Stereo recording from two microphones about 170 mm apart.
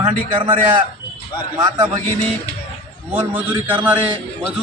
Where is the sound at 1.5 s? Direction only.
20° right (ahead or behind).